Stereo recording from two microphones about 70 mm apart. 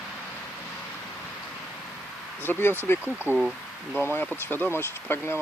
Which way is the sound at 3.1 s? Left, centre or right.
Right.